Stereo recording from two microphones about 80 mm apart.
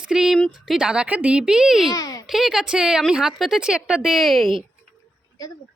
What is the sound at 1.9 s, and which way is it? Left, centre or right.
Music, left.